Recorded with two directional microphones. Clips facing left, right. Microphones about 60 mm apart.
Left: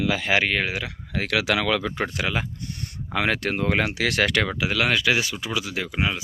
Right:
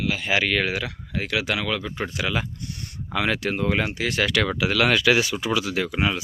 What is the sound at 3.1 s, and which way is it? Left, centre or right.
Speech, left.